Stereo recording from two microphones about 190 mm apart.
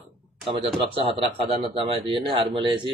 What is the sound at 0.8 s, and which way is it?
A man's voice, 25° right (ahead or behind).